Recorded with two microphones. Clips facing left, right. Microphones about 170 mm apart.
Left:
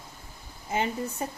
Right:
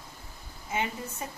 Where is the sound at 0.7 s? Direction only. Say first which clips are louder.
Left 4 dB; 35° left (ahead or behind).